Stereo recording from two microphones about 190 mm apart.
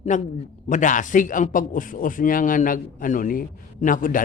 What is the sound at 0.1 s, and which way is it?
A man's voice, 40° left (ahead or behind).